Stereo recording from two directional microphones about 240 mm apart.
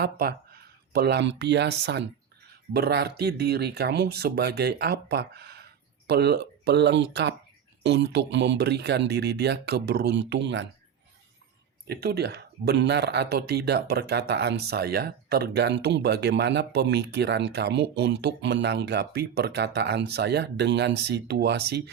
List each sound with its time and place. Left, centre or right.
0.0 s speech: right
11.9 s speech: right